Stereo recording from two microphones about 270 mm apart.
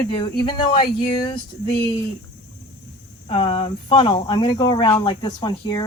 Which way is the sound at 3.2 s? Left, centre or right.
Left.